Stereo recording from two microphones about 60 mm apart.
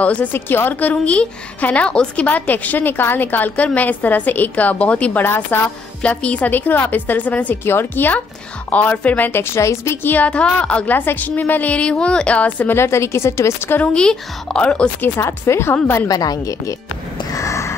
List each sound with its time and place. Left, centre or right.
0.0 s a woman's voice: left
0.3 s a woman's voice: left
5.2 s a woman's voice: left
6.0 s a woman's voice: left
7.6 s a woman's voice: left
9.3 s a woman's voice: left
10.0 s a woman's voice: left
10.9 s a woman's voice: left
12.7 s a woman's voice: left
13.9 s a woman's voice: centre
15.0 s a woman's voice: left
16.1 s a woman's voice: left
17.3 s a sound: left